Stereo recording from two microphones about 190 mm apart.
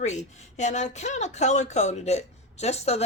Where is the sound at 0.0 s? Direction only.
35° left (ahead or behind).